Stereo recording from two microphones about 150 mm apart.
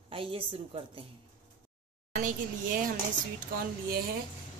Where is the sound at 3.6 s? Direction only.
90° right.